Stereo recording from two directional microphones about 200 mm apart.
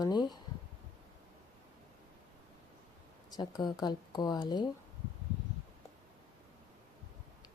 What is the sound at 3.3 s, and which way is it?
Speech, 20° left (ahead or behind).